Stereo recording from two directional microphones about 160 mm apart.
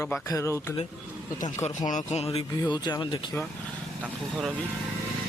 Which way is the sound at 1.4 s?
50° left (ahead or behind).